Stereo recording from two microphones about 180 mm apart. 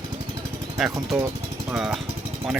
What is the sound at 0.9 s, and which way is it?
Speech, 15° right (ahead or behind).